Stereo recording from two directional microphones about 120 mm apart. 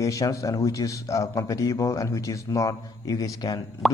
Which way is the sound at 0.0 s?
25° left (ahead or behind).